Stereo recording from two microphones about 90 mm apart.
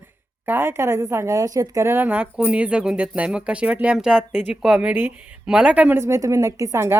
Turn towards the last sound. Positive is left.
turn(degrees=-30)  # may be behind; listen again after turning